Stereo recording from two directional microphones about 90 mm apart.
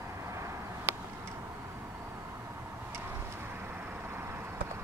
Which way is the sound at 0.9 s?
30° right (ahead or behind).